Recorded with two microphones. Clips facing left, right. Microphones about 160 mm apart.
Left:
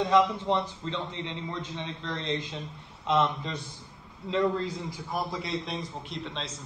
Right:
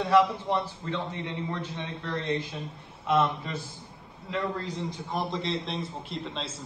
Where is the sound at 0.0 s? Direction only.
20° left (ahead or behind).